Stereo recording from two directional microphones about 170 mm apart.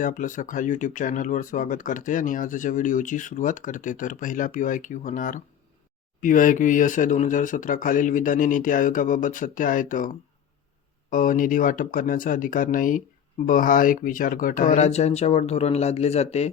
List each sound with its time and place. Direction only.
0.0 s speech: 50° left (ahead or behind)
11.1 s speech: 50° left (ahead or behind)